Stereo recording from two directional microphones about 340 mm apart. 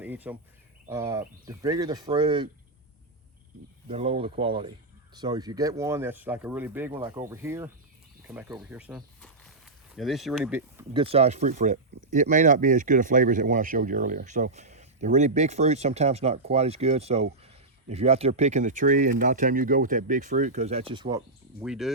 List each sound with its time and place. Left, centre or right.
0.0 s a sound: centre
0.9 s speech: centre
3.8 s speech: centre
21.6 s speech: centre